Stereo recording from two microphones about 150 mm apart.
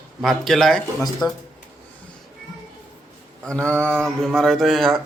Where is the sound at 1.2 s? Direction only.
25° left (ahead or behind).